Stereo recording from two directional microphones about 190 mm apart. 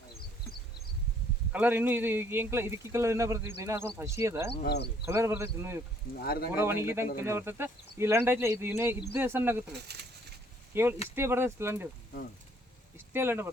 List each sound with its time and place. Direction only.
1.5 s speech: 10° right (ahead or behind)
4.6 s speech: 60° left (ahead or behind)
5.0 s speech: 10° right (ahead or behind)
6.2 s speech: 55° left (ahead or behind)
6.5 s speech: 15° right (ahead or behind)
9.7 s speech: 60° right (ahead or behind)
10.7 s speech: 10° right (ahead or behind)
13.1 s speech: 10° right (ahead or behind)